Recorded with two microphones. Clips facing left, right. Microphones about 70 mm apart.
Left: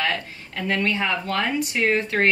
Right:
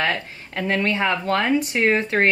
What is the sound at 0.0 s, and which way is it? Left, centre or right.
Speech, right.